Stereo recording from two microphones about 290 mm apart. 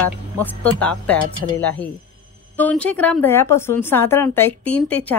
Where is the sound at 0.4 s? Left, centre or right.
Centre.